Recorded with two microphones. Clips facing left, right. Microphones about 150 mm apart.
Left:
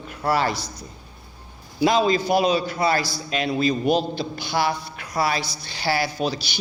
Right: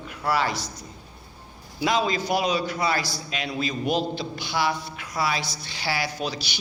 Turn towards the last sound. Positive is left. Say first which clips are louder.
# left 5 dB
turn(degrees=35)  # may be behind; listen again after turning